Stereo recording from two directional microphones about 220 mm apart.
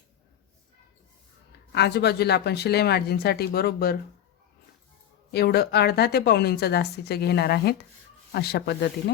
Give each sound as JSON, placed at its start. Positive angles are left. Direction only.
{"t": 1.7, "sound": "a woman's voice", "side_deg": 50}
{"t": 5.3, "sound": "a woman's voice", "side_deg": 45}